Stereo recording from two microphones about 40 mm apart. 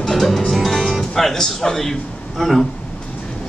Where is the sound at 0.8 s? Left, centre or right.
Centre.